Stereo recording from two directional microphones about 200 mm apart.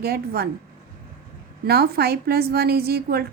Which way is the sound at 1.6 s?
50° right (ahead or behind).